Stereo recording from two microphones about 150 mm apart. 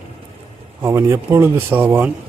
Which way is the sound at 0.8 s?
15° right (ahead or behind).